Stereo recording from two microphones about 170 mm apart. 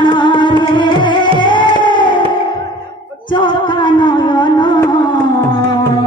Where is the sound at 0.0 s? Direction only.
25° left (ahead or behind).